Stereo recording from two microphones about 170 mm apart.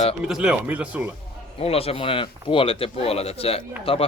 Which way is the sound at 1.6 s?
35° left (ahead or behind).